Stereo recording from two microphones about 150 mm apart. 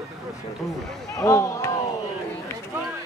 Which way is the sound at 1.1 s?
20° left (ahead or behind).